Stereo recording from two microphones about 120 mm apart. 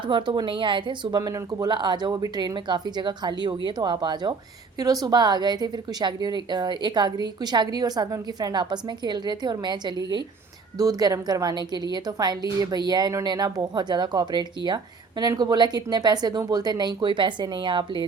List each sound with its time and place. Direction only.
0.1 s a woman's voice: 40° right (ahead or behind)